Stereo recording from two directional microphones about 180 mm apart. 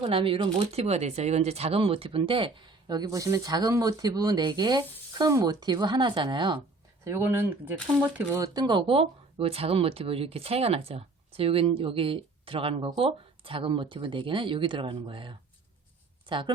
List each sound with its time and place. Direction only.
0.0 s speech: 30° right (ahead or behind)
7.0 s speech: 15° right (ahead or behind)